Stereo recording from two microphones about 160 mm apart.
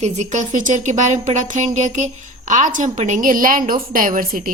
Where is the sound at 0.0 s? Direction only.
45° right (ahead or behind).